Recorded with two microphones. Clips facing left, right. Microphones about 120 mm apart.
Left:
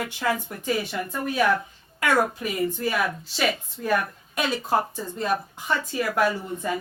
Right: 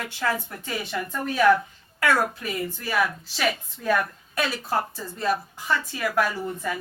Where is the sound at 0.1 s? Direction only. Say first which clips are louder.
Left 1 dB; 15° left (ahead or behind).